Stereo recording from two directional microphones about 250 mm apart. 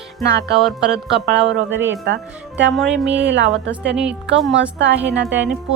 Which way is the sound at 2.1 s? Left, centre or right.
Right.